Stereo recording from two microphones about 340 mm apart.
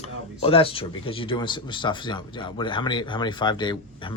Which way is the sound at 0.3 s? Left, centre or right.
Centre.